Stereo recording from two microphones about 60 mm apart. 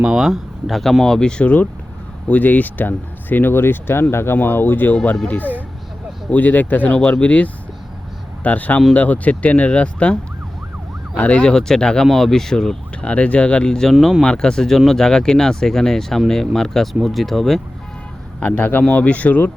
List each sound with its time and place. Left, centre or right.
0.0 s speech: centre; by 4.9 s left
6.3 s speech: left
11.2 s speech: left
13.1 s speech: left; by 17.6 s centre
18.3 s speech: left